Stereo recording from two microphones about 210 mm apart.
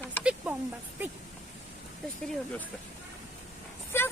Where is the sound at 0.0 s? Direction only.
5° left (ahead or behind).